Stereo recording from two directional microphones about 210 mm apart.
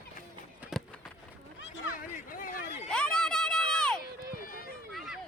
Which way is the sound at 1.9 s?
40° left (ahead or behind).